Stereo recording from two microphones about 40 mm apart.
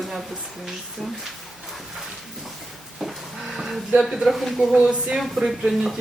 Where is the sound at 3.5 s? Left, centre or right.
Centre.